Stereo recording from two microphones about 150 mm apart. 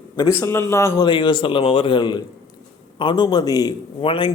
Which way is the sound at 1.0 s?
30° left (ahead or behind).